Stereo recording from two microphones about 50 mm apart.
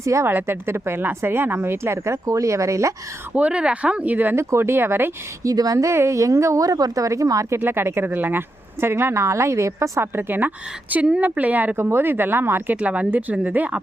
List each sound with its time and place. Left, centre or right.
0.0 s a woman's voice: right
0.3 s speech: right
3.3 s speech: right
4.4 s speech: right
5.4 s speech: right
7.6 s speech: right
8.1 s speech: right
10.0 s speech: right
11.2 s speech: right
11.8 s speech: right
12.7 s speech: right